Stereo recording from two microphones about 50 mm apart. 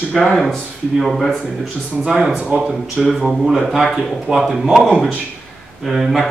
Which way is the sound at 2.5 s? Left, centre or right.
Centre.